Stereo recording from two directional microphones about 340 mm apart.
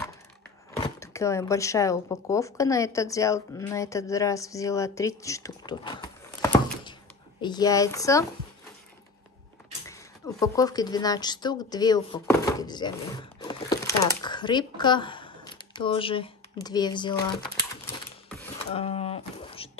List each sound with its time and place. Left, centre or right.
0.8 s a woman's voice: centre
9.8 s a woman's voice: centre
17.2 s typewriter: centre
18.7 s a sound: centre